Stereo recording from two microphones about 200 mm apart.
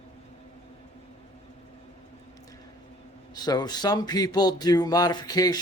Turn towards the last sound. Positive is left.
turn(degrees=20)  # may be behind; listen again after turning